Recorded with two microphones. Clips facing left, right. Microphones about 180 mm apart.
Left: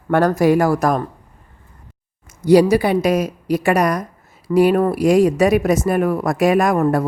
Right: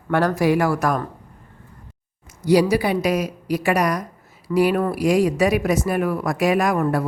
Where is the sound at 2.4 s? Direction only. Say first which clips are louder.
Left 5 dB; 50° left (ahead or behind).